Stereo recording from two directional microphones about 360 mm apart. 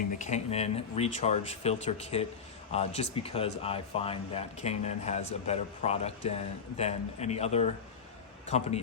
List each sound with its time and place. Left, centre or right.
0.2 s speech: centre